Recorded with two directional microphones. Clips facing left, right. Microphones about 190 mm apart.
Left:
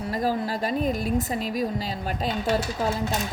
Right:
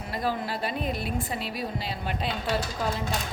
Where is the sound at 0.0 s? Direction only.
40° left (ahead or behind).